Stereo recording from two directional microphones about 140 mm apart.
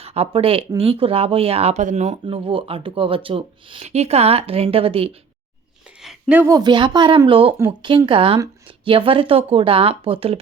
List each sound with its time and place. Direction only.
0.0 s speech: 45° right (ahead or behind)
2.2 s speech: 40° right (ahead or behind)
6.0 s a sound: 5° right (ahead or behind)
6.5 s speech: 30° right (ahead or behind)